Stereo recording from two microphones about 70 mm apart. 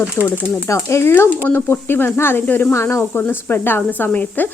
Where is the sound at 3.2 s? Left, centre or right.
Left.